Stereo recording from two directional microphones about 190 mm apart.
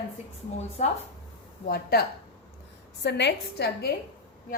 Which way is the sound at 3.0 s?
65° left (ahead or behind).